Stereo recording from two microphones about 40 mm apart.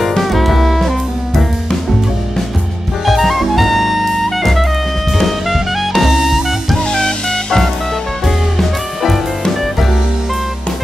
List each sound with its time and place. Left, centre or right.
0.0 s music: centre
3.1 s music: centre
6.9 s music: centre
8.5 s music: centre